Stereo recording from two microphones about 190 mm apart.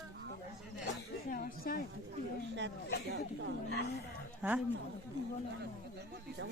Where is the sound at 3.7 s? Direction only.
60° left (ahead or behind).